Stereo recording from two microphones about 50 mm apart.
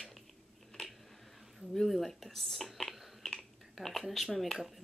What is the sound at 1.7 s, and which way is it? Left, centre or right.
Speech, centre.